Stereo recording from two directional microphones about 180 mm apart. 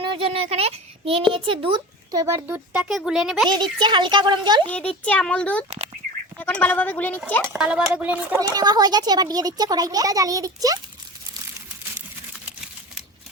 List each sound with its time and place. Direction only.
0.0 s a child's voice: 30° right (ahead or behind); by 3.5 s centre (ahead or behind)
3.5 s a child's voice: 25° right (ahead or behind)
4.7 s a child's voice: 5° left (ahead or behind)
7.5 s speech: 5° right (ahead or behind)
8.4 s a child's voice: 20° right (ahead or behind)